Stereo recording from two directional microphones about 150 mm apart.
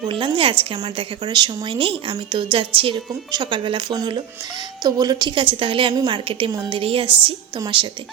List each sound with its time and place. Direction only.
0.1 s a woman's voice: 35° right (ahead or behind)